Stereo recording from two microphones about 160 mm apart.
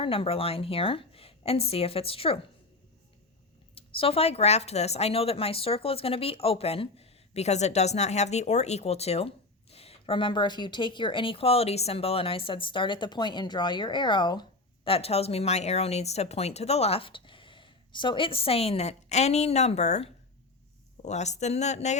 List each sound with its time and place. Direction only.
0.0 s speech: 35° left (ahead or behind)
3.8 s speech: 35° left (ahead or behind)